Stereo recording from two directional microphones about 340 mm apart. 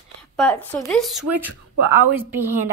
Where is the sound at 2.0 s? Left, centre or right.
Right.